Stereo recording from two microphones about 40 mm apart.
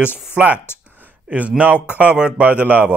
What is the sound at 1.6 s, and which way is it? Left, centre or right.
Speech, right.